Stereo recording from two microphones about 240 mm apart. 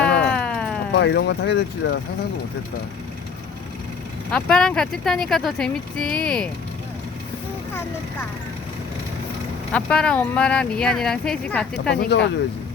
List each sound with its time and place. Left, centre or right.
0.3 s a sound: centre
0.9 s speech: left
4.3 s speech: centre
9.7 s speech: centre
11.9 s speech: left